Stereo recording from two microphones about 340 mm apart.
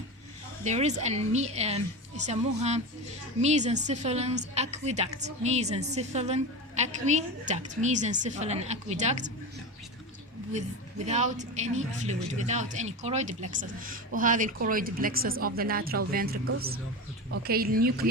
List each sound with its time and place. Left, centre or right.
0.6 s a woman's voice: centre
10.5 s a woman's voice: right